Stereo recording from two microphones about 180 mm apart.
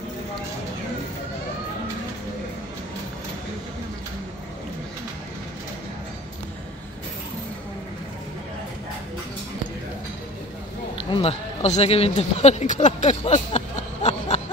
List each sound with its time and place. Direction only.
11.1 s speech: 35° left (ahead or behind)